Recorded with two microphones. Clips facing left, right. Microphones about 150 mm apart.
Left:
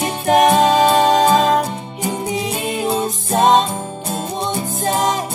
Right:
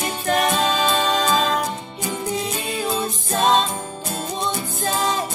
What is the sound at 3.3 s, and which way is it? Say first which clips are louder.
Music: left 5 dB; 50° left (ahead or behind).